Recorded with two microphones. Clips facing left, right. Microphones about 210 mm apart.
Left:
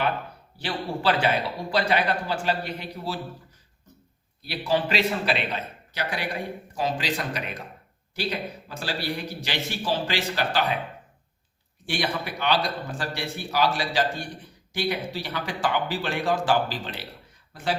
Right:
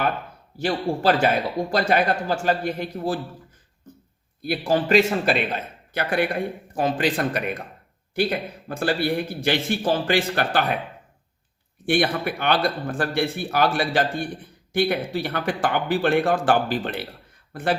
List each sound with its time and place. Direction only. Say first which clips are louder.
0.6 s a man's voice: right 5 dB; 45° right (ahead or behind)
11.9 s a man's voice: right 7 dB; 55° right (ahead or behind)